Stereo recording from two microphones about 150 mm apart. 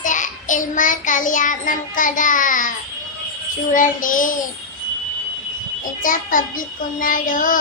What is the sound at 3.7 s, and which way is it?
Child singing, 60° left (ahead or behind).